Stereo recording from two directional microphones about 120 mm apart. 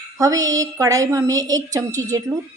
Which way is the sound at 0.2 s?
30° right (ahead or behind).